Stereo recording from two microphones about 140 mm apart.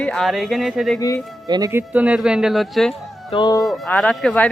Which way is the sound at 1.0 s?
25° left (ahead or behind).